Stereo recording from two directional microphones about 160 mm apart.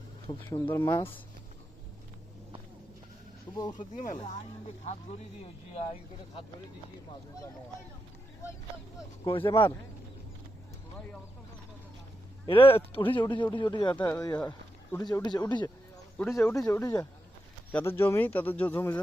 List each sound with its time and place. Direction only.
0.4 s speech: 15° left (ahead or behind)
3.5 s speech: 25° left (ahead or behind)
3.8 s speech: 55° left (ahead or behind); by 6.4 s 40° left (ahead or behind)
9.2 s speech: 30° left (ahead or behind)
12.5 s speech: 35° left (ahead or behind)
17.7 s speech: 10° left (ahead or behind)